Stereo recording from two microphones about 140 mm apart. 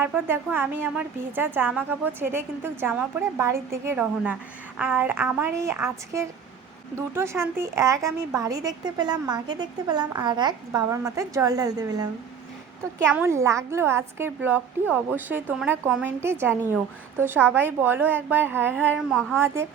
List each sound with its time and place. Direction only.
0.0 s a woman's voice: 15° right (ahead or behind); by 10.5 s 30° right (ahead or behind)
10.7 s a woman's voice: 20° right (ahead or behind)
13.1 s a woman's voice: 20° right (ahead or behind)